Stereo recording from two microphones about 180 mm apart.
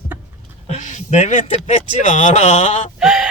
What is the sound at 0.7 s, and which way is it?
Speech, 40° left (ahead or behind).